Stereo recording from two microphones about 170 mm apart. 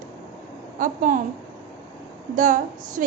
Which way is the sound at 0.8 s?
50° right (ahead or behind).